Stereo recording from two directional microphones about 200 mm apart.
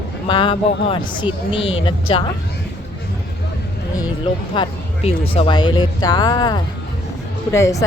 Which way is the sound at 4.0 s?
25° left (ahead or behind).